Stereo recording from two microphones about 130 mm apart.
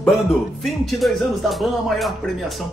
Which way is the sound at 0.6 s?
Centre (ahead or behind).